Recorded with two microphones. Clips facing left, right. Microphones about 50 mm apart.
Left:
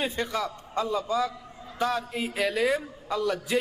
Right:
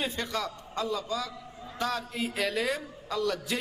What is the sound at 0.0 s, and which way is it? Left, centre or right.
Speech, centre.